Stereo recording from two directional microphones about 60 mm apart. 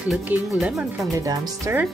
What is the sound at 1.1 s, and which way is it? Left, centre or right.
Speech, right.